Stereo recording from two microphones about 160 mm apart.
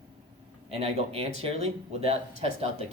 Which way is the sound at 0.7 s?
40° right (ahead or behind).